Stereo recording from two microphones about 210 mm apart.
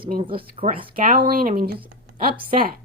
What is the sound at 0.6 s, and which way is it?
Speech, 25° right (ahead or behind).